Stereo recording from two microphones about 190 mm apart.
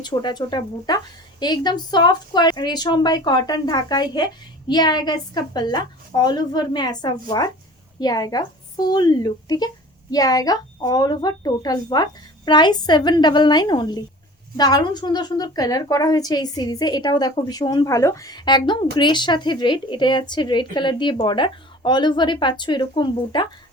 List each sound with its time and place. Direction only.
0.0 s a woman's voice: 25° left (ahead or behind)